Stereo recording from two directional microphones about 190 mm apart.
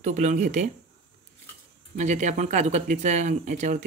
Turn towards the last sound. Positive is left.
turn(degrees=-40)  # may be behind; listen again after turning